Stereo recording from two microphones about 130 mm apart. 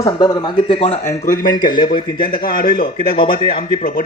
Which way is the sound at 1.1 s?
80° left.